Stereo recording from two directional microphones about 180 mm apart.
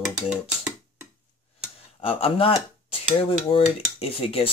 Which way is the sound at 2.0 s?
30° left (ahead or behind).